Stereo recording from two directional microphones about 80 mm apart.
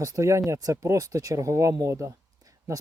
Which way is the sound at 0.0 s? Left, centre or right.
Right.